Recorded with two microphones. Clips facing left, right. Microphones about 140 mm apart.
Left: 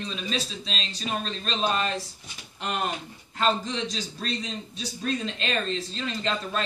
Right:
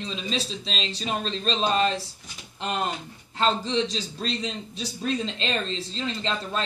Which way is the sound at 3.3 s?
30° right (ahead or behind).